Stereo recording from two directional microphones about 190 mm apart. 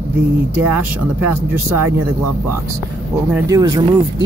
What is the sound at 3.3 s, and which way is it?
Speech, 20° right (ahead or behind).